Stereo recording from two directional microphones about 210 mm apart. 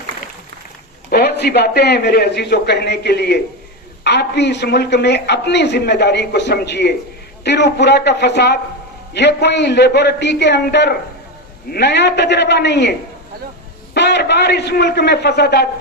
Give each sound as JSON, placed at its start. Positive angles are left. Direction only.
{"t": 1.1, "sound": "a man's voice", "side_deg": 50}
{"t": 13.9, "sound": "a man's voice", "side_deg": 55}